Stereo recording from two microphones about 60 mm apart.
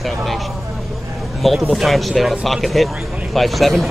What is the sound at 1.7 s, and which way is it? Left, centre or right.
Speech, centre.